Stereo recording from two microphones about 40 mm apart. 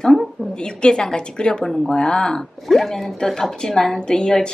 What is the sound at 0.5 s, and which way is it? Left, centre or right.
A woman's voice, left.